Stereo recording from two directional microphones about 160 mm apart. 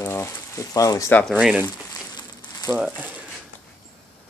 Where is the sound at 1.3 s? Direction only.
5° right (ahead or behind).